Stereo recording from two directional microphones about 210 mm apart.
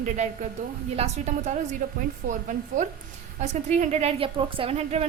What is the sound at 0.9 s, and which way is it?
A woman's voice, 30° right (ahead or behind).